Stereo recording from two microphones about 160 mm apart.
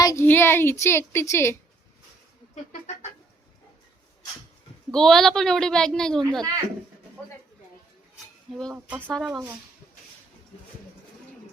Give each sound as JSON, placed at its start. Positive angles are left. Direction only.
{"t": 0.0, "sound": "a woman's voice", "side_deg": 20}
{"t": 4.9, "sound": "a woman's voice", "side_deg": 5}
{"t": 9.0, "sound": "a woman's voice", "side_deg": 5}